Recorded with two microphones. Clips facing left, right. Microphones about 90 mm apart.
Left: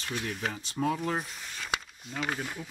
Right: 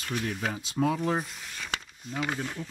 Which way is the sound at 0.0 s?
Centre (ahead or behind).